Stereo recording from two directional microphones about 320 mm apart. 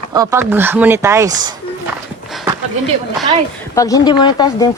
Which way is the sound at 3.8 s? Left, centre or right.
Centre.